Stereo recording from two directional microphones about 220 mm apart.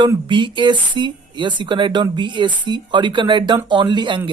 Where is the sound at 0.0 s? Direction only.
20° right (ahead or behind).